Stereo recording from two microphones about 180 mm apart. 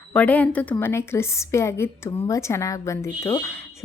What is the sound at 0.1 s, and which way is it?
A woman's voice, 10° left (ahead or behind).